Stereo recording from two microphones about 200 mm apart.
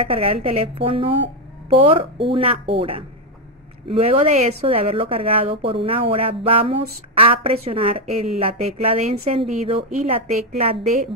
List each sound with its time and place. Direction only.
0.1 s a woman's voice: 30° right (ahead or behind)